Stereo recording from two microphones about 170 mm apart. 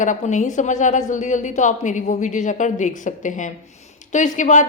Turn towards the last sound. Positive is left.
turn(degrees=45)  # may be behind; listen again after turning